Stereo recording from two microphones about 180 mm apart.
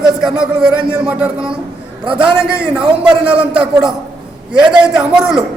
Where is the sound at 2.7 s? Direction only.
5° right (ahead or behind).